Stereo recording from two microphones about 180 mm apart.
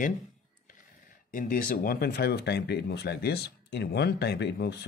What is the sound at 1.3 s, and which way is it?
Speech, 50° left (ahead or behind).